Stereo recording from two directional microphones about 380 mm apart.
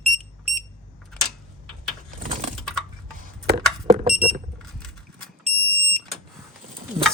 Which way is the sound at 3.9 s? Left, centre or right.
Centre.